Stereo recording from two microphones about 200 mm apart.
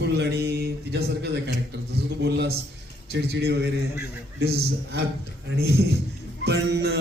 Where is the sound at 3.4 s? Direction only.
55° right (ahead or behind).